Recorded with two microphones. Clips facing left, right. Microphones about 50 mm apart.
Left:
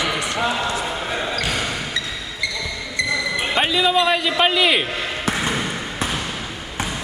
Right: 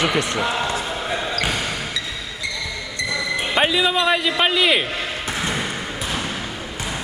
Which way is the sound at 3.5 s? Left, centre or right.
Centre.